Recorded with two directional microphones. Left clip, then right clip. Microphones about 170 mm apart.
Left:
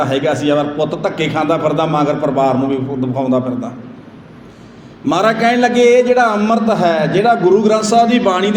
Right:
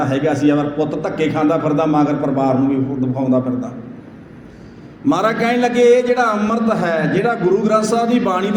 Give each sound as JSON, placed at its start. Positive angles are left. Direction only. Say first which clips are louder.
{"t": 0.0, "sound": "a man's voice", "louder": "left 1 dB", "side_deg": 30}
{"t": 5.0, "sound": "a man's voice", "louder": "left 3 dB", "side_deg": 30}